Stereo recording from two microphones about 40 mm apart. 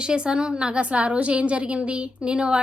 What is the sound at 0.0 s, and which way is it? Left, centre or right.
A woman's voice, right.